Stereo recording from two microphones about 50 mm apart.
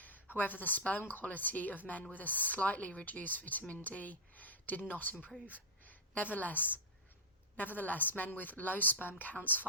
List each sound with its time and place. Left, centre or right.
0.3 s a woman's voice: left
3.8 s a sound: left
4.9 s a woman's voice: left